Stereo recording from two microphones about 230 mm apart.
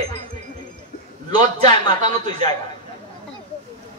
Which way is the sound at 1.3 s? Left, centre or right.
Centre.